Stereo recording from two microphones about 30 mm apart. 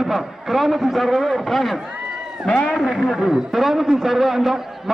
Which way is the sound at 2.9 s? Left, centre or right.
Centre.